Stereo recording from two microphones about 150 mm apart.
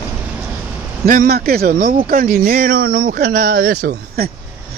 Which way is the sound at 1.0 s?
75° right (ahead or behind).